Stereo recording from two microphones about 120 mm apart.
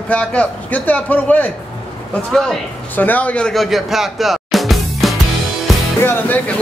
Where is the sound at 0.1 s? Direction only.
10° left (ahead or behind).